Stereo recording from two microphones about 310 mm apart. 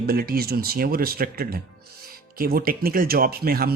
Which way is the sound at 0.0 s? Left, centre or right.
Right.